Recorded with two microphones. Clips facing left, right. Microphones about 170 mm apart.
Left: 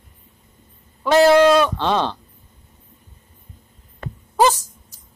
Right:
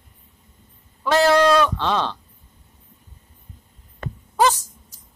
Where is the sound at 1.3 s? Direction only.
20° left (ahead or behind).